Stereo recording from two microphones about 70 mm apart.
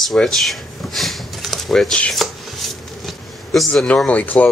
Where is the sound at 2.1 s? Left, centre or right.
Centre.